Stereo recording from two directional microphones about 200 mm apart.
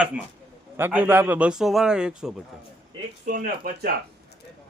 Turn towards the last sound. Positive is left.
turn(degrees=-45)  # may be behind; listen again after turning